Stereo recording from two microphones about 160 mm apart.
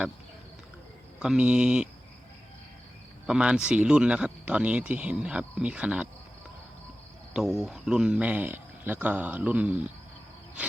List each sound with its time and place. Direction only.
1.2 s speech: 5° right (ahead or behind)
3.2 s speech: 5° right (ahead or behind)
7.3 s speech: centre (ahead or behind)